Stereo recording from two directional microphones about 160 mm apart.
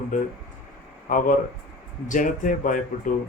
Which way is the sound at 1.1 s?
55° left (ahead or behind).